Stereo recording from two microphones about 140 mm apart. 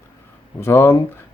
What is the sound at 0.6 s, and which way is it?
Speech, 15° left (ahead or behind).